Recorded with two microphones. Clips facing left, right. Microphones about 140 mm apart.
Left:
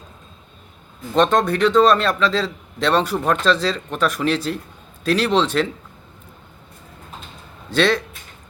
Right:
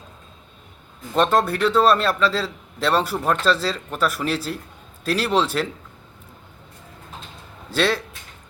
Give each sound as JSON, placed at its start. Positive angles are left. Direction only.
{"t": 1.1, "sound": "a man's voice", "side_deg": -5}
{"t": 7.7, "sound": "a man's voice", "side_deg": -5}